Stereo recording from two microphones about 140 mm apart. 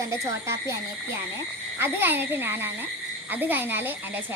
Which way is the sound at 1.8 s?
15° right (ahead or behind).